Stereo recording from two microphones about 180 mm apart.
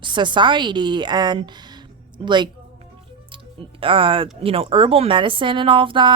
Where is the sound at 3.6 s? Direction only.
30° right (ahead or behind).